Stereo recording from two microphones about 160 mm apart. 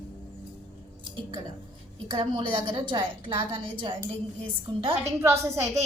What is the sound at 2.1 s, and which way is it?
A woman's voice, 30° right (ahead or behind).